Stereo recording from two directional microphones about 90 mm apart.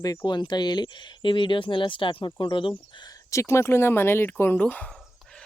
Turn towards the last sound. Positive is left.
turn(degrees=15)  # may be behind; listen again after turning